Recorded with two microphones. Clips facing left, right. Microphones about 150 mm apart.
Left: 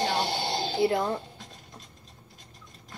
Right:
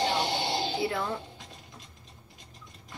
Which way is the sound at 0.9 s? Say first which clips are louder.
Left 5 dB; 40° left (ahead or behind).